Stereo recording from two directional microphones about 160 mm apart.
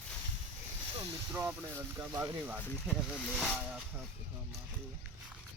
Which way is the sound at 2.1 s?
25° right (ahead or behind).